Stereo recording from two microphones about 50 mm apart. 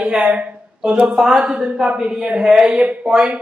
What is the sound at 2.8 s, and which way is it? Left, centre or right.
Speech, right.